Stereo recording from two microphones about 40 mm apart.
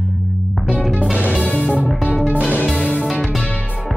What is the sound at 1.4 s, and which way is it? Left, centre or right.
Music, left.